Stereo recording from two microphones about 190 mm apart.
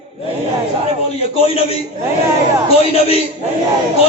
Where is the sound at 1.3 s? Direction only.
30° left (ahead or behind).